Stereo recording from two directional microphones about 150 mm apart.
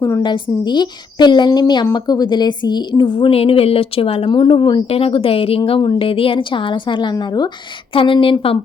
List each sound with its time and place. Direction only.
0.0 s a woman's voice: 25° left (ahead or behind)